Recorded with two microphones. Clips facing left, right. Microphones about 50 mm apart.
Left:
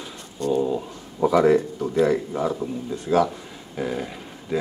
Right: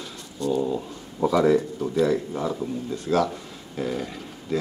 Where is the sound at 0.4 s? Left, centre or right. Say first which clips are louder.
Left 2 dB; left.